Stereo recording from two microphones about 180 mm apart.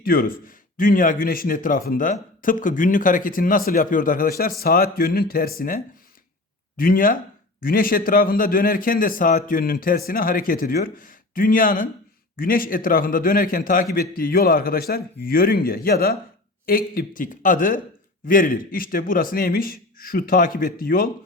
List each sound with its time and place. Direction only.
0.0 s a man's voice: 55° left (ahead or behind)